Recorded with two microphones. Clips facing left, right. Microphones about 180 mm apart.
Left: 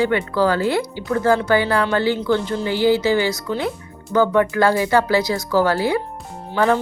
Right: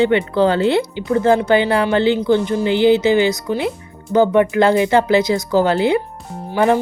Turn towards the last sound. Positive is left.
turn(degrees=-20)  # may be behind; listen again after turning